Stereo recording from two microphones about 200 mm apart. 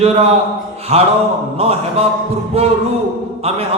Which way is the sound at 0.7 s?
30° right (ahead or behind).